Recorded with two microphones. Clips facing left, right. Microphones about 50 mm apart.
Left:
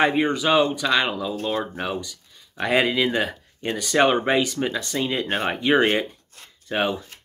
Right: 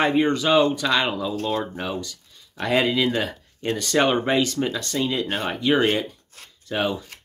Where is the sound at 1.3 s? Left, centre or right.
Left.